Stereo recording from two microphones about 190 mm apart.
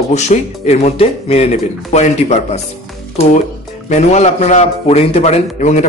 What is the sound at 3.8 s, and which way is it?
Speech, 35° left (ahead or behind).